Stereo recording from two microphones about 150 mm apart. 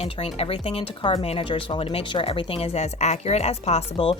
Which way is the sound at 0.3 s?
40° left (ahead or behind).